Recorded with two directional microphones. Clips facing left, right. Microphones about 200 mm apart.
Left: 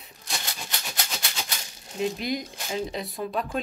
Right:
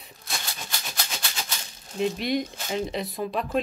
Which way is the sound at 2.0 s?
Centre (ahead or behind).